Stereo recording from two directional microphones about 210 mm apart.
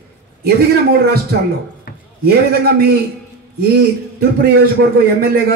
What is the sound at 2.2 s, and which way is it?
Speech, 50° right (ahead or behind).